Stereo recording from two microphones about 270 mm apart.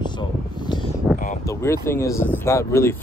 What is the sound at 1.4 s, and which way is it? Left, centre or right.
Speech, centre.